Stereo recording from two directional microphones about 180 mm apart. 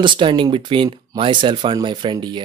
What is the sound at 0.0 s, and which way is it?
Speech, 25° right (ahead or behind).